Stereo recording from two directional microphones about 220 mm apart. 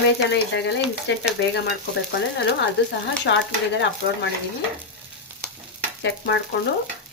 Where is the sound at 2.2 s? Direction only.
50° left (ahead or behind).